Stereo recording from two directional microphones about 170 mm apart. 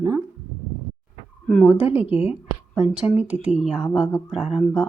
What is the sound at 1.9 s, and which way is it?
A woman's voice, 10° right (ahead or behind).